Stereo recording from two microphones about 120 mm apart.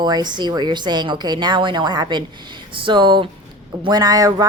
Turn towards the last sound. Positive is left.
turn(degrees=-30)  # may be behind; listen again after turning